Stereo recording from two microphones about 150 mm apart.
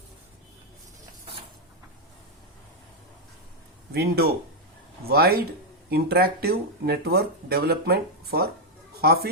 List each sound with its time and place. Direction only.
3.9 s speech: 90° right